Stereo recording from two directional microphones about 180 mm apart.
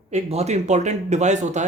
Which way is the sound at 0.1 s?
35° right (ahead or behind).